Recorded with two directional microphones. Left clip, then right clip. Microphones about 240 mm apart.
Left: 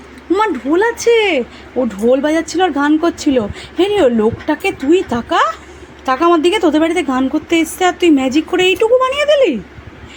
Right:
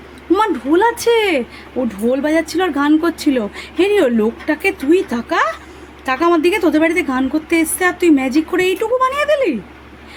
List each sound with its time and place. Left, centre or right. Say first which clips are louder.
0.3 s speech: left 1 dB; centre